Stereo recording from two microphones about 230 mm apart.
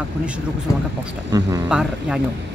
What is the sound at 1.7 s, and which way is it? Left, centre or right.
Speech, centre.